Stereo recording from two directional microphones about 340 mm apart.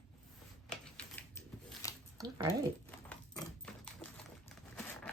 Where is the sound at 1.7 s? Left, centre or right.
Centre.